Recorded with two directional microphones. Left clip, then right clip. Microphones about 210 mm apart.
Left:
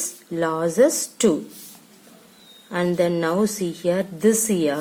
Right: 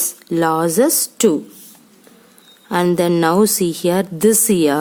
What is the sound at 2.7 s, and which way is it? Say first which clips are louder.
A woman's voice: right 5 dB; 55° right (ahead or behind).